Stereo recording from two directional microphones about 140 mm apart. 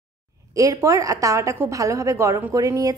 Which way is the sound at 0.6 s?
25° right (ahead or behind).